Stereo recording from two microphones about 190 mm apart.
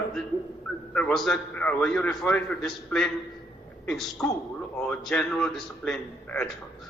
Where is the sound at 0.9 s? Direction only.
5° left (ahead or behind).